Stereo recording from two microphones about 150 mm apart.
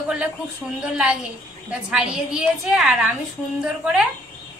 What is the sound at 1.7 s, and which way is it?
A woman's voice, 5° right (ahead or behind).